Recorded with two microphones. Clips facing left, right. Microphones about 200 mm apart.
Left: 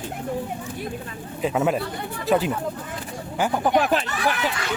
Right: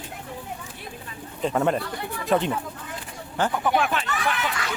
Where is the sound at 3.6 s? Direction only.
35° left (ahead or behind).